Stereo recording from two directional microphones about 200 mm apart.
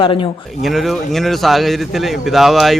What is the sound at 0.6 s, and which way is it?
Speech, centre (ahead or behind).